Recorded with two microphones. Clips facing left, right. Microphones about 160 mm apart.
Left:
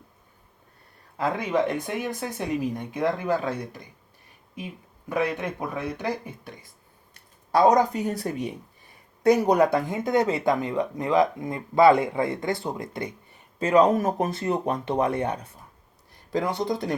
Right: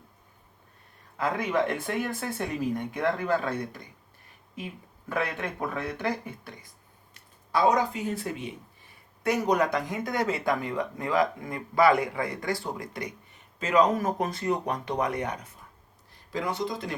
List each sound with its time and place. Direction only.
1.1 s speech: 25° left (ahead or behind)
7.5 s speech: 40° left (ahead or behind)
16.5 s speech: 65° left (ahead or behind)